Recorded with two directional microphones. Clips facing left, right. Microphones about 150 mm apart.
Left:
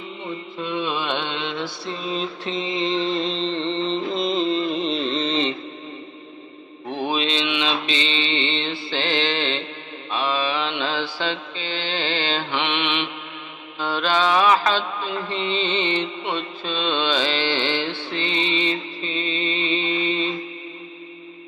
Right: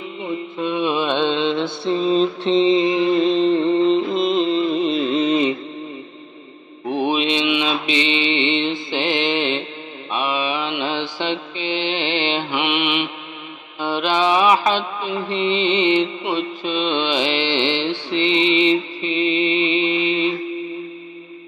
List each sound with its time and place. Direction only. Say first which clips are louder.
0.6 s mantra: right 5 dB; 20° right (ahead or behind)
3.6 s music: right 8 dB; 5° right (ahead or behind)
6.9 s mantra: right 5 dB; 15° right (ahead or behind)
18.2 s music: right 8 dB; 15° right (ahead or behind)